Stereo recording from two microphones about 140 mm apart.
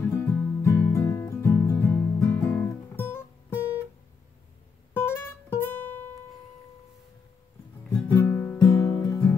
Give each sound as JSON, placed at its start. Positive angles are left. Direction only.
{"t": 0.3, "sound": "music", "side_deg": 15}
{"t": 4.9, "sound": "music", "side_deg": 15}
{"t": 7.9, "sound": "music", "side_deg": 15}